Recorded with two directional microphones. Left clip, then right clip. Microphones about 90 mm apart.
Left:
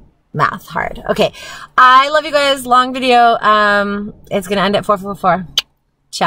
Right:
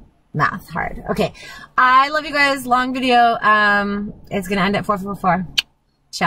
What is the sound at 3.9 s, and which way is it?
Speech, 30° left (ahead or behind).